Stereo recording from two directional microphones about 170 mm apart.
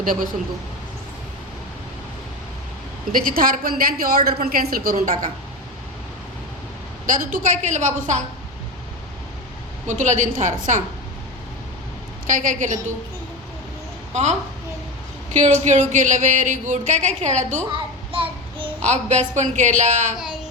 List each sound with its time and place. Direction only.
0.0 s a woman's voice: 55° right (ahead or behind)
3.1 s a woman's voice: 55° right (ahead or behind)
7.1 s a woman's voice: 55° right (ahead or behind)
9.8 s a woman's voice: 45° right (ahead or behind)
12.4 s a woman's voice: 45° right (ahead or behind)
14.1 s a woman's voice: 40° right (ahead or behind)
18.1 s child singing: 30° right (ahead or behind)
18.9 s a woman's voice: 45° right (ahead or behind)